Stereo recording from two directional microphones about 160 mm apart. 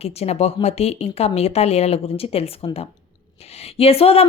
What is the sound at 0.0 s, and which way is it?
Speech, 40° left (ahead or behind).